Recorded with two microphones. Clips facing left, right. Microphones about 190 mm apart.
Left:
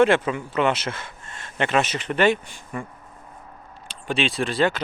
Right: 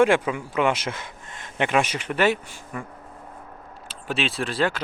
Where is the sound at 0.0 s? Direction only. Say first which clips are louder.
Left 1 dB; 10° right (ahead or behind).